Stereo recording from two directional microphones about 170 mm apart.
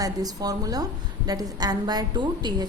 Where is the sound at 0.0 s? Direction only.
20° right (ahead or behind).